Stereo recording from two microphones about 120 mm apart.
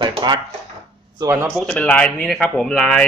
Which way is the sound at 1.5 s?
10° left (ahead or behind).